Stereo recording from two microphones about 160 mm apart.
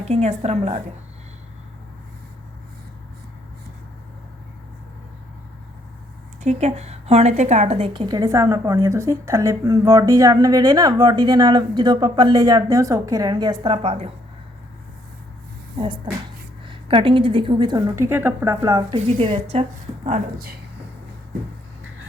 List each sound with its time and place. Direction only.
0.0 s a woman's voice: 40° right (ahead or behind)
6.4 s a woman's voice: 45° right (ahead or behind)
16.6 s a woman's voice: 35° right (ahead or behind)